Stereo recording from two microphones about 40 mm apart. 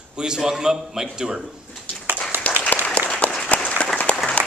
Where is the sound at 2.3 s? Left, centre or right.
Right.